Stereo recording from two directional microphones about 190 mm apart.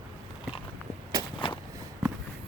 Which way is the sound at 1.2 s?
20° right (ahead or behind).